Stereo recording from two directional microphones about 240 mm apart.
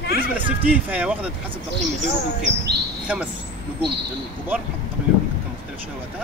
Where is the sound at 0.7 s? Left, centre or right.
Centre.